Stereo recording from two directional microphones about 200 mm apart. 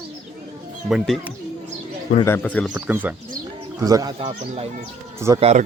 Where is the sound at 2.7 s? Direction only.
10° right (ahead or behind).